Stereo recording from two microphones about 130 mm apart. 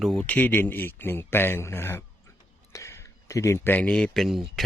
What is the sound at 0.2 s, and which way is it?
Speech, 10° left (ahead or behind).